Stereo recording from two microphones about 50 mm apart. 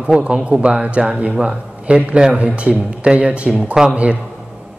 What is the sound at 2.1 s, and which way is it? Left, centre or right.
A man's voice, right.